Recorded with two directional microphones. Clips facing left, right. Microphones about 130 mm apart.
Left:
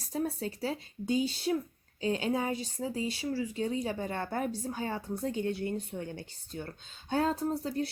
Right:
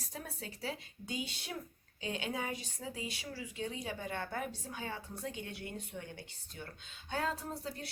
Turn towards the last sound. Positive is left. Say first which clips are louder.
# left 11 dB
turn(degrees=35)  # may be behind; listen again after turning